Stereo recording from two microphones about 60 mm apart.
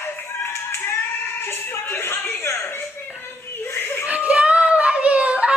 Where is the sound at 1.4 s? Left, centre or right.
Left.